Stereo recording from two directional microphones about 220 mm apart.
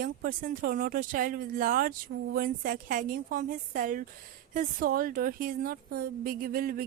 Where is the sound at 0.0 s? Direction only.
40° right (ahead or behind).